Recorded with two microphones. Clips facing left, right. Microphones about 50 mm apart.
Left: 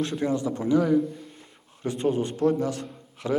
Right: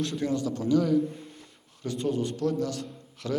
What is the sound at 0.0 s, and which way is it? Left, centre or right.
A man's voice, left.